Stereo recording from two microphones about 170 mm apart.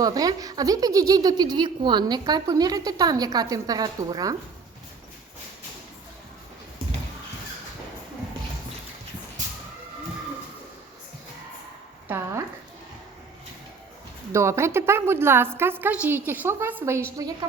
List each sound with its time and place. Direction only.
0.0 s speech: 20° right (ahead or behind)
12.0 s a woman's voice: 15° right (ahead or behind)
14.3 s a woman's voice: 15° right (ahead or behind)